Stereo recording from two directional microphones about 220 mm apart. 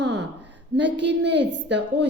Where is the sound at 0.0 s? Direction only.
50° right (ahead or behind).